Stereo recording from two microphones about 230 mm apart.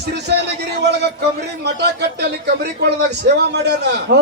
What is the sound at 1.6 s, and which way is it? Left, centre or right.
A man's voice, right.